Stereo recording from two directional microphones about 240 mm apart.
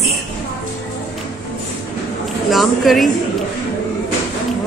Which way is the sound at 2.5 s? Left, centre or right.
Centre.